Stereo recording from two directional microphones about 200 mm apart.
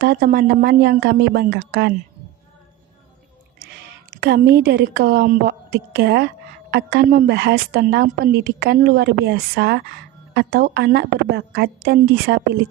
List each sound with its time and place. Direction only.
0.0 s a woman's voice: 50° right (ahead or behind)
3.8 s a woman's voice: 55° right (ahead or behind)